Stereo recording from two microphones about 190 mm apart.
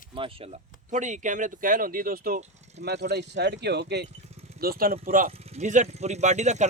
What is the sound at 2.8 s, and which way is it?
Speech, 60° right (ahead or behind).